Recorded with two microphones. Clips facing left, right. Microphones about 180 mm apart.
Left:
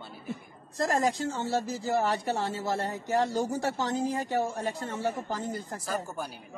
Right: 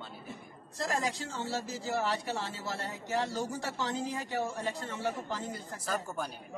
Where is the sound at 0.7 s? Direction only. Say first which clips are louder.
Left 6 dB; 50° left (ahead or behind).